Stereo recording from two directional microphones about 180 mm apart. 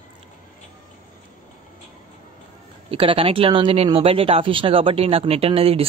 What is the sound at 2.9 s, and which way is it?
Speech, 30° right (ahead or behind).